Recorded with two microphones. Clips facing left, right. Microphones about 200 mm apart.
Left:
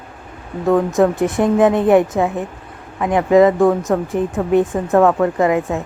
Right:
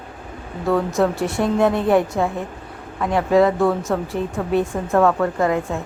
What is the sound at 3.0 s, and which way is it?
Speech, 15° left (ahead or behind).